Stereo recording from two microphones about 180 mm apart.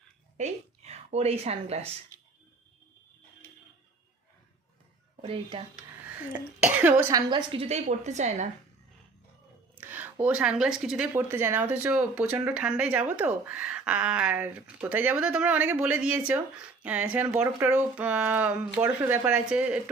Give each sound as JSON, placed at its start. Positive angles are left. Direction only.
{"t": 0.3, "sound": "a woman's voice", "side_deg": -40}
{"t": 5.2, "sound": "a woman's voice", "side_deg": -30}
{"t": 6.7, "sound": "speech", "side_deg": -10}
{"t": 7.1, "sound": "a woman's voice", "side_deg": -20}
{"t": 9.8, "sound": "speech", "side_deg": -10}